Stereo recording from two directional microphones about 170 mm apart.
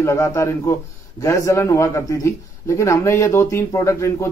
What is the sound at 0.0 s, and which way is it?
A man's voice, 15° left (ahead or behind).